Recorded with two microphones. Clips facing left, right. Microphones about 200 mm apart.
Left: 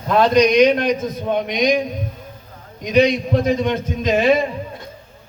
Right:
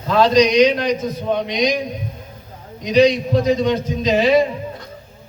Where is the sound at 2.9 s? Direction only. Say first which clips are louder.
Right 2 dB; 55° left (ahead or behind).